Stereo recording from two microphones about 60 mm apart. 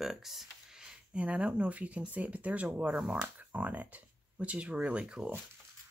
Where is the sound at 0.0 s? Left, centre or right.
Centre.